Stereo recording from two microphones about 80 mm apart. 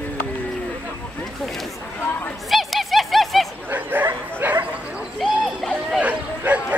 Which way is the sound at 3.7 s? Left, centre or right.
Right.